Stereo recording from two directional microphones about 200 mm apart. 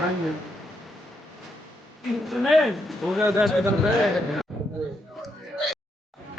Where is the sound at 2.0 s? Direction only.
Centre (ahead or behind).